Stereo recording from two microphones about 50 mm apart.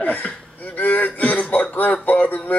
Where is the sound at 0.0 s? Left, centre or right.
Left.